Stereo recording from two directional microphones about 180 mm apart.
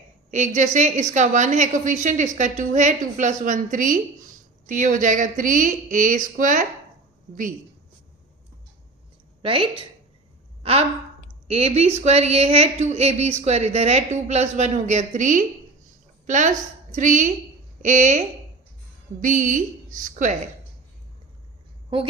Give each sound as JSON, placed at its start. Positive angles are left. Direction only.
{"t": 0.3, "sound": "a woman's voice", "side_deg": -45}
{"t": 9.4, "sound": "a woman's voice", "side_deg": -30}
{"t": 19.2, "sound": "a woman's voice", "side_deg": -45}